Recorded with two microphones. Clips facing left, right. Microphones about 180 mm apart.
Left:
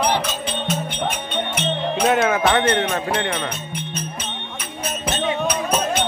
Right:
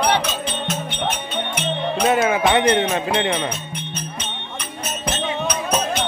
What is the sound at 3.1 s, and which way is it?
Speech, 20° right (ahead or behind).